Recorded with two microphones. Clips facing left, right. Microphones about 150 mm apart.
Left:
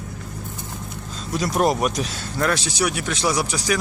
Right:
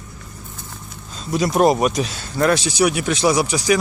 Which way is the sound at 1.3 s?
10° right (ahead or behind).